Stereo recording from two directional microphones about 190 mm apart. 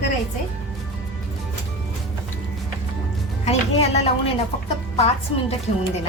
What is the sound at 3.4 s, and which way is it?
A woman's voice, 35° left (ahead or behind).